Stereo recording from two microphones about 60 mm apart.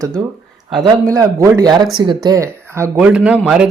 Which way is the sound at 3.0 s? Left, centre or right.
Centre.